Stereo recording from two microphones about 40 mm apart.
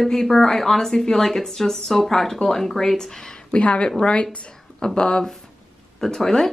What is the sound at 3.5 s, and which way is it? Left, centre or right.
Speech, left.